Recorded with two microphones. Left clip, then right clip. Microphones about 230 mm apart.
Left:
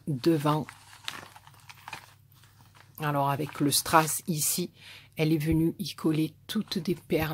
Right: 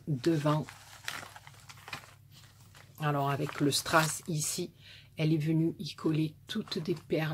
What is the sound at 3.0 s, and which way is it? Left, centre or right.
Speech, left.